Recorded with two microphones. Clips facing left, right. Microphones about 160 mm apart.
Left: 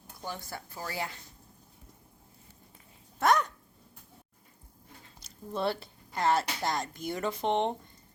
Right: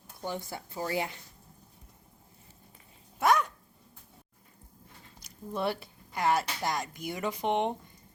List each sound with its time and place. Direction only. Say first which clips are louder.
0.3 s speech: right 3 dB; 20° right (ahead or behind)
3.2 s dog: even; 5° right (ahead or behind)
5.2 s speech: even; 15° right (ahead or behind)